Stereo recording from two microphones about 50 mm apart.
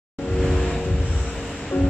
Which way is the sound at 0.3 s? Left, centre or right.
Centre.